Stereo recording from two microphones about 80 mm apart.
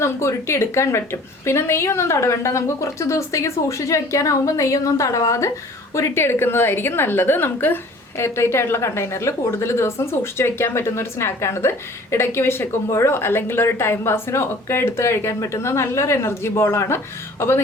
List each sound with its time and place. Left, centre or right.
0.0 s a woman's voice: left